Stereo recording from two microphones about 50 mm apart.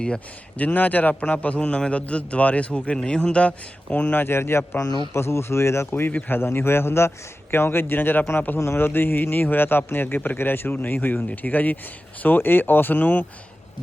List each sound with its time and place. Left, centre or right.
0.5 s a man's voice: left
3.9 s a man's voice: left
6.1 s a man's voice: left
8.5 s a man's voice: left
11.2 s speech: left
12.2 s speech: left